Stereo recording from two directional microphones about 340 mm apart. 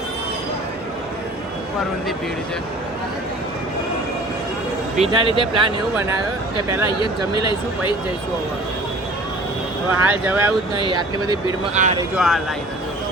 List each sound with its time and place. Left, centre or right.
4.9 s speech: centre
10.1 s speech: centre
12.1 s speech: centre